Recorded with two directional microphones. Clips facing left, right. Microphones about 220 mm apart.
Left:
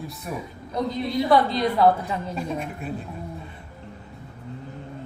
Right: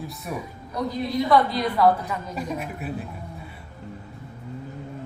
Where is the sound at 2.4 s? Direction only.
5° right (ahead or behind).